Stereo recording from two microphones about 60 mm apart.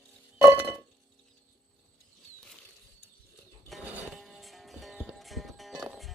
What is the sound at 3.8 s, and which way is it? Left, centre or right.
Music, right.